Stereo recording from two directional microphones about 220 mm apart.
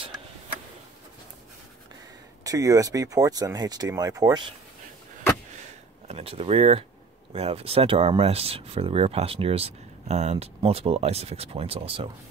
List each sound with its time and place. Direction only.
2.4 s speech: 15° right (ahead or behind)
6.0 s speech: 25° right (ahead or behind)